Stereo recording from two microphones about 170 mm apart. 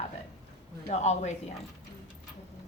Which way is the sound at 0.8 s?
40° left (ahead or behind).